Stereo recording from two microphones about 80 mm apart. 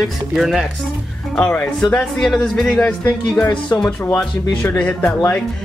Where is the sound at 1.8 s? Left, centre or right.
Centre.